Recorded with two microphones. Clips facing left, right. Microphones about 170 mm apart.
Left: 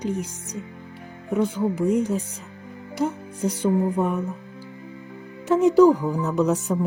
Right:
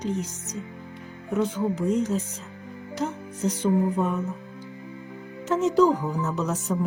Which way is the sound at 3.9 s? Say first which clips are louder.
Left 2 dB; 15° left (ahead or behind).